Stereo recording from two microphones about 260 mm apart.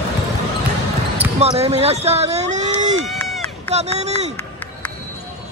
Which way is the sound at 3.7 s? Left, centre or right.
Right.